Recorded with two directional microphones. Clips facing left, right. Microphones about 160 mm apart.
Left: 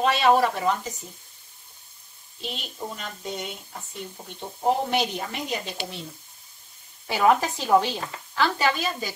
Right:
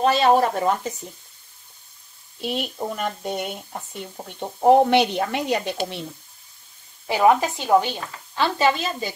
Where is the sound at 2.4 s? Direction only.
60° right (ahead or behind).